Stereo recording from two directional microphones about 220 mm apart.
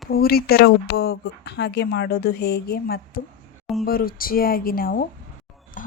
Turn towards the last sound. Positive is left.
turn(degrees=35)  # may be behind; listen again after turning